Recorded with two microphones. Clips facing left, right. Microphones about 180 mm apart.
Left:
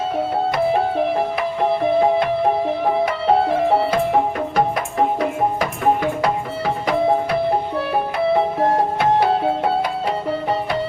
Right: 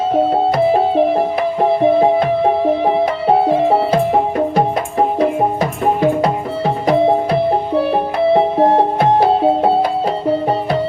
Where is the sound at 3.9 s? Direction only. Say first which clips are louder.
Right 4 dB; 35° right (ahead or behind).